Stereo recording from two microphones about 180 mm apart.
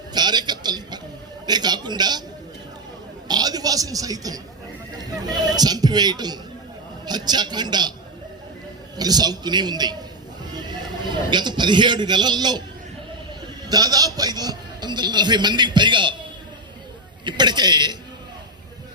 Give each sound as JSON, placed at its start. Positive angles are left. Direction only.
{"t": 0.1, "sound": "a sound", "side_deg": -25}
{"t": 1.5, "sound": "a man's voice", "side_deg": -25}
{"t": 3.2, "sound": "a man's voice", "side_deg": -20}
{"t": 9.0, "sound": "a man's voice", "side_deg": -20}
{"t": 10.5, "sound": "horse", "side_deg": -25}
{"t": 11.3, "sound": "a man's voice", "side_deg": -25}
{"t": 13.7, "sound": "a man's voice", "side_deg": -20}
{"t": 17.2, "sound": "a man's voice", "side_deg": -25}